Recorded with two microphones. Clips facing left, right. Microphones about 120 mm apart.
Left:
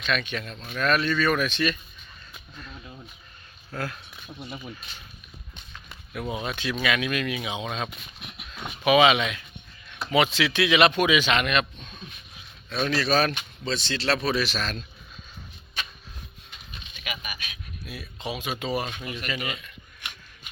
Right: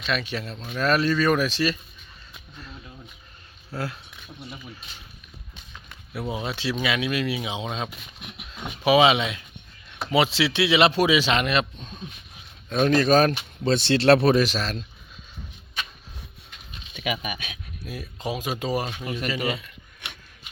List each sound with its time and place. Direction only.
0.0 s speech: 30° right (ahead or behind)
3.8 s speech: 25° right (ahead or behind)
4.3 s speech: 20° left (ahead or behind)
6.1 s speech: 25° right (ahead or behind)
12.6 s speech: 45° right (ahead or behind)
13.7 s speech: 60° right (ahead or behind)
14.4 s speech: 35° right (ahead or behind)
17.8 s speech: 40° right (ahead or behind)